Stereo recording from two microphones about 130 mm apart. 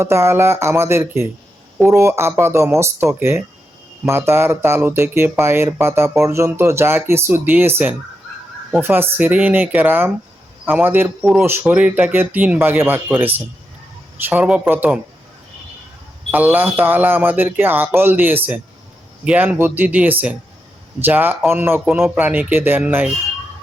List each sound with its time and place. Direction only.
0.0 s speech: 20° right (ahead or behind)
16.3 s speech: 15° right (ahead or behind)